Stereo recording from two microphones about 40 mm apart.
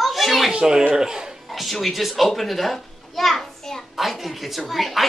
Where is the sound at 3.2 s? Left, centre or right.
Centre.